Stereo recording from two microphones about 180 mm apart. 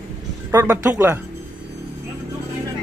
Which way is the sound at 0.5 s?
15° right (ahead or behind).